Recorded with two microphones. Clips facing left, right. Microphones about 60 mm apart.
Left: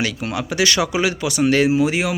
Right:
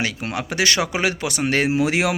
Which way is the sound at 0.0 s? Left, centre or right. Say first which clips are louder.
Left 2 dB; right.